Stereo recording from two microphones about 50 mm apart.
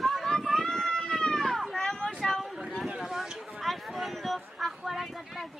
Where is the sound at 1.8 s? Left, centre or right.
Centre.